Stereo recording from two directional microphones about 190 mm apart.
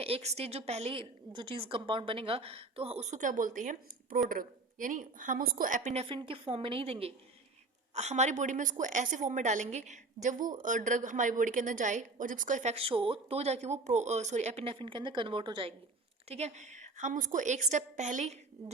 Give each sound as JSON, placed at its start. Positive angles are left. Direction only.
{"t": 0.0, "sound": "a woman's voice", "side_deg": -35}